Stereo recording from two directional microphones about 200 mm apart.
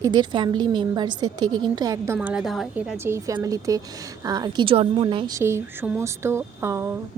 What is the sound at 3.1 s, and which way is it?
A woman's voice, 15° right (ahead or behind).